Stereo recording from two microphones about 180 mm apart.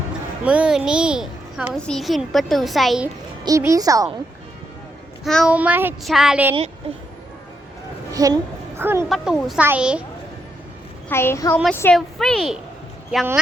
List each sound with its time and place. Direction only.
0.4 s a child's voice: 5° right (ahead or behind)
3.4 s speech: 20° right (ahead or behind)
5.2 s a child's voice: centre (ahead or behind)
6.8 s speech: 30° right (ahead or behind)
8.1 s a child's voice: 20° right (ahead or behind)
9.0 s a child's voice: centre (ahead or behind)
11.1 s a child's voice: 15° left (ahead or behind)